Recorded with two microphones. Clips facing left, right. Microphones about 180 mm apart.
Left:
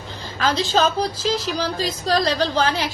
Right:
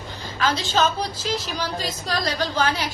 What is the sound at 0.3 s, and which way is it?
A woman's voice, 35° left (ahead or behind).